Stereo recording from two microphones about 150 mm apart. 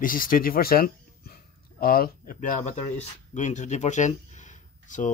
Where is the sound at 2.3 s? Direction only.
50° left (ahead or behind).